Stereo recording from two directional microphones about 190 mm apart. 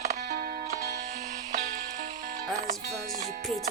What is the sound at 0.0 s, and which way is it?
Music, 45° right (ahead or behind).